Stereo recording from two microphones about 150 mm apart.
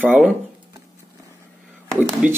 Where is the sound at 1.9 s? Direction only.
10° right (ahead or behind).